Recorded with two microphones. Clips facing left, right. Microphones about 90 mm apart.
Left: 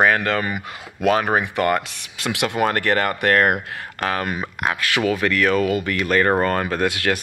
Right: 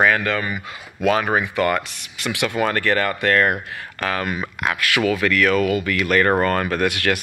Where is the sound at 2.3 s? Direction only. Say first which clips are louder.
Even; 60° left (ahead or behind).